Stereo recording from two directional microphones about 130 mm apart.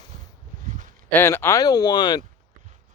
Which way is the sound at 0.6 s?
80° right.